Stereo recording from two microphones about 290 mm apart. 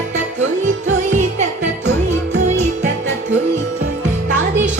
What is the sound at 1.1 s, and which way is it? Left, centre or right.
Music, right.